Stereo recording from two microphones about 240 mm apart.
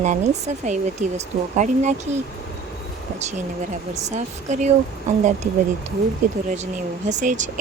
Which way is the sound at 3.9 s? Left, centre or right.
Right.